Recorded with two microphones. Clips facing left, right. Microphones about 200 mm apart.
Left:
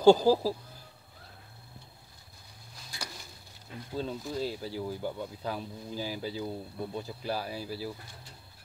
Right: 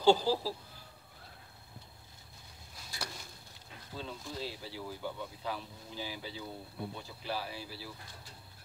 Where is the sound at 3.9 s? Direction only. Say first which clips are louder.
Left 8 dB; 45° left (ahead or behind).